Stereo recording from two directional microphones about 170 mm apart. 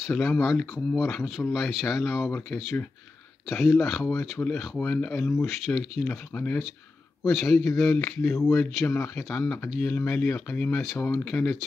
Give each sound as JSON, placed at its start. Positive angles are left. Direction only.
{"t": 0.2, "sound": "speech", "side_deg": 15}
{"t": 0.6, "sound": "speech", "side_deg": 0}
{"t": 2.3, "sound": "speech", "side_deg": 10}
{"t": 7.9, "sound": "speech", "side_deg": 15}